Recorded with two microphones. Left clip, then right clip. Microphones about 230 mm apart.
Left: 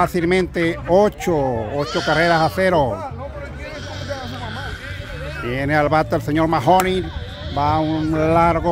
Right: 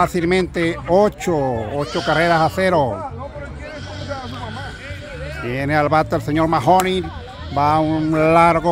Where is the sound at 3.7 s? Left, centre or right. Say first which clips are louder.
Even; left.